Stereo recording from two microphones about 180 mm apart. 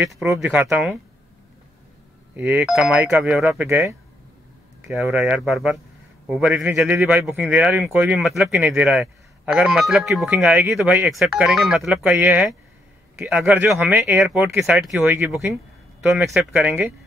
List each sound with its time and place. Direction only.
0.0 s a man's voice: 10° right (ahead or behind)
2.3 s a man's voice: 10° right (ahead or behind)
3.4 s a man's voice: 15° right (ahead or behind)
5.0 s a man's voice: 10° right (ahead or behind)